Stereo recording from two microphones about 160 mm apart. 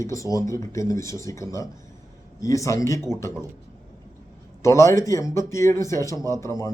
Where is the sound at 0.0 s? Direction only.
20° left (ahead or behind).